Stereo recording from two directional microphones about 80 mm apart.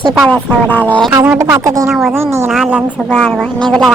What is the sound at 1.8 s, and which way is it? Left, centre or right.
Speech, centre.